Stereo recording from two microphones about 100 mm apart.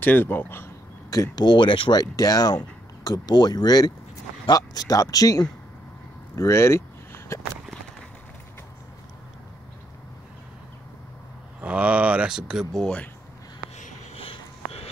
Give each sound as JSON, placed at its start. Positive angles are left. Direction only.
{"t": 0.0, "sound": "speech", "side_deg": 20}
{"t": 1.1, "sound": "speech", "side_deg": 40}
{"t": 2.1, "sound": "speech", "side_deg": 40}
{"t": 6.3, "sound": "a sound", "side_deg": 30}
{"t": 11.6, "sound": "speech", "side_deg": -10}
{"t": 12.8, "sound": "speech", "side_deg": 10}
{"t": 14.1, "sound": "a sound", "side_deg": 70}